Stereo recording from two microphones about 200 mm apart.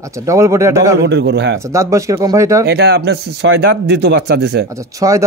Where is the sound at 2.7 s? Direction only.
55° right (ahead or behind).